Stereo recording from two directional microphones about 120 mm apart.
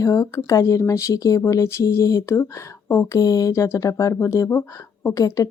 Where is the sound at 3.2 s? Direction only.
30° left (ahead or behind).